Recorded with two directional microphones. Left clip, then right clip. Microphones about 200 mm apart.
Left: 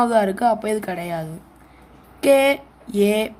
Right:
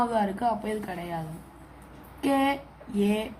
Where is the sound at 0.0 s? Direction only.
60° left (ahead or behind).